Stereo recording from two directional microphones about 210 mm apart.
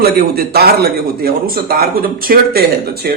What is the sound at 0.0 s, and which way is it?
A man's voice, 45° right (ahead or behind).